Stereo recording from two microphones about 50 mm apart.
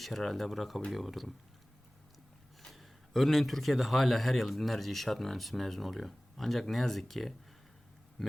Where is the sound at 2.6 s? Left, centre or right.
Centre.